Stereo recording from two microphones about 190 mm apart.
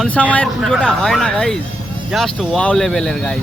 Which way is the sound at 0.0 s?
5° left (ahead or behind).